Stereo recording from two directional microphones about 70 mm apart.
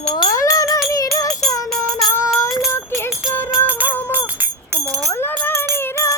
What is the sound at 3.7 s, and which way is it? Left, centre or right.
Music, right.